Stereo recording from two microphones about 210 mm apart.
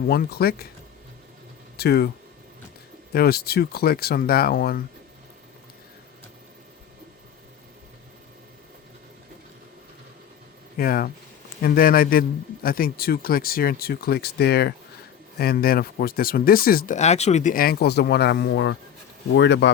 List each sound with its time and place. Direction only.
0.1 s speech: 50° left (ahead or behind)
1.7 s speech: 50° left (ahead or behind)
3.1 s speech: 45° left (ahead or behind)
10.8 s speech: 45° left (ahead or behind)